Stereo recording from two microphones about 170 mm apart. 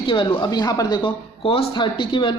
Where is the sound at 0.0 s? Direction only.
30° left (ahead or behind).